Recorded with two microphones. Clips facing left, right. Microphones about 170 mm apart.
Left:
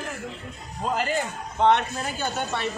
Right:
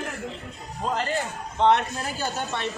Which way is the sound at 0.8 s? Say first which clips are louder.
Left 1 dB; centre (ahead or behind).